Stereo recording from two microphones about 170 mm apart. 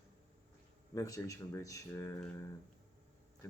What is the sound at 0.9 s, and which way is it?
Speech, 20° left (ahead or behind).